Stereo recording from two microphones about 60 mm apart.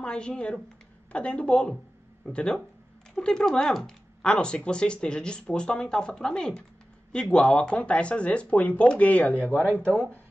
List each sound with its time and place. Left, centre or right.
0.0 s speech: centre